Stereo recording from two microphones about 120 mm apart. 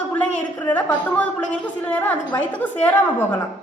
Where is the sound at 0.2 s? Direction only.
15° left (ahead or behind).